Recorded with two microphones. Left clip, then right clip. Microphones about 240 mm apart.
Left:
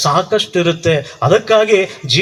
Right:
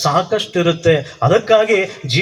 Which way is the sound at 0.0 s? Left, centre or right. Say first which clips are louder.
Left 2 dB; left.